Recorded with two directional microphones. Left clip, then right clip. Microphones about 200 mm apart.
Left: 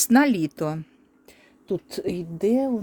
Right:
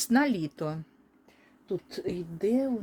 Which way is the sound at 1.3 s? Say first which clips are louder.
Left 6 dB; 55° left (ahead or behind).